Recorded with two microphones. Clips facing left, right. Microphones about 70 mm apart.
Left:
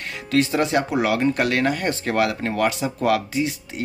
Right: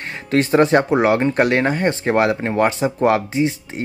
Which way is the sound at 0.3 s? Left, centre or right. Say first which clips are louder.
Right 5 dB; right.